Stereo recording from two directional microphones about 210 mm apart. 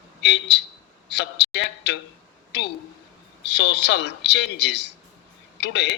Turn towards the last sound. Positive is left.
turn(degrees=55)  # may be behind; listen again after turning